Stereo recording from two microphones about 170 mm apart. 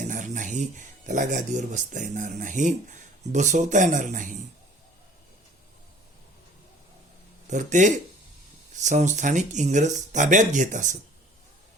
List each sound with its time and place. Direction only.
0.1 s speech: 50° right (ahead or behind)
7.4 s speech: 45° right (ahead or behind)